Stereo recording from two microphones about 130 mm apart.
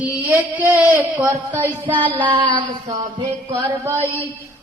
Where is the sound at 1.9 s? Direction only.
40° right (ahead or behind).